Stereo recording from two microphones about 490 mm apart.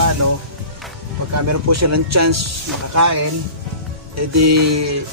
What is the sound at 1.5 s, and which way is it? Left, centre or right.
Speech, right.